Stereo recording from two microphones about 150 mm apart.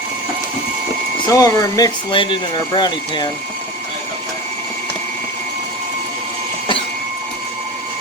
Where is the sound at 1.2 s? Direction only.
25° left (ahead or behind).